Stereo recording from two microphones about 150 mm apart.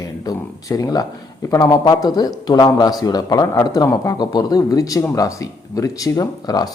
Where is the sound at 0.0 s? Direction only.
25° left (ahead or behind).